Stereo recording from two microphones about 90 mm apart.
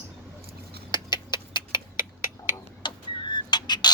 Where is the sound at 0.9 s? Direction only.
55° left (ahead or behind).